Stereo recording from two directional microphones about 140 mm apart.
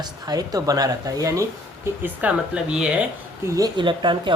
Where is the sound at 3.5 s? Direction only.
25° right (ahead or behind).